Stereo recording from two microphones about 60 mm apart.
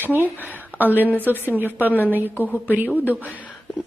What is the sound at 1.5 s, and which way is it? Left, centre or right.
Speech, right.